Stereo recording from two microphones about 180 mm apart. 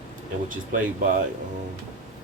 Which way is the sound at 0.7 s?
45° right (ahead or behind).